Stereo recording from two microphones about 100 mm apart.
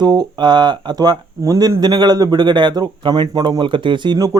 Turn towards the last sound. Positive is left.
turn(degrees=-50)  # may be behind; listen again after turning